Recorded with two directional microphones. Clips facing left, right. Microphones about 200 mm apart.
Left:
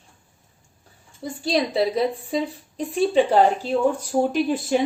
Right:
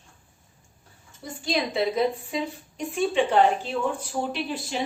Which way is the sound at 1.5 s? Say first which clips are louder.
Left 4 dB; 35° left (ahead or behind).